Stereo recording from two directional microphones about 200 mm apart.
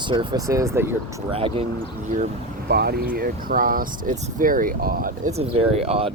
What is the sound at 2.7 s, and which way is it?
Speech, 50° right (ahead or behind).